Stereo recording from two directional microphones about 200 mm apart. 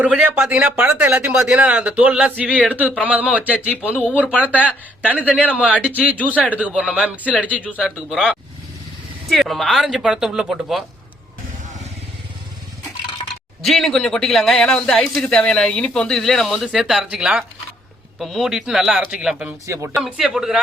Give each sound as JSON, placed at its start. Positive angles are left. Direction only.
{"t": 0.0, "sound": "a man's voice", "side_deg": -5}
{"t": 13.7, "sound": "a man's voice", "side_deg": 0}
{"t": 19.6, "sound": "speech", "side_deg": -15}
{"t": 20.0, "sound": "a man's voice", "side_deg": 0}